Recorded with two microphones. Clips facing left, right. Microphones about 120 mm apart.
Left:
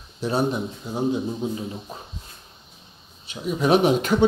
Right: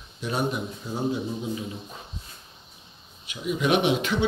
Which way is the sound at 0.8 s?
15° left (ahead or behind).